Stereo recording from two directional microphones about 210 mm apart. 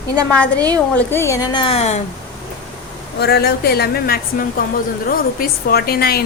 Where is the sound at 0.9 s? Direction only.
10° left (ahead or behind); by 2.0 s 30° left (ahead or behind).